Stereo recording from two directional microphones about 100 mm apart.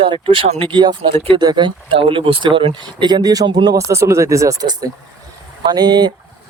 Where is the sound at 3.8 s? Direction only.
30° right (ahead or behind).